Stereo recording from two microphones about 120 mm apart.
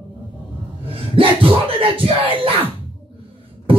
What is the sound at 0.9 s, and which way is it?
Speech, 50° right (ahead or behind).